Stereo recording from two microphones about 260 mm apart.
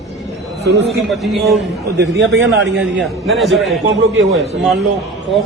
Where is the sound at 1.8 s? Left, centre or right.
Right.